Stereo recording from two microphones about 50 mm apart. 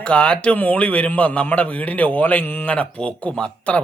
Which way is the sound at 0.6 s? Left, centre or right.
Left.